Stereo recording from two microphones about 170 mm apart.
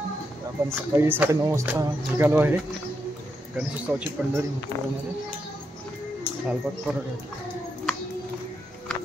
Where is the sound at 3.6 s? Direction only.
5° right (ahead or behind).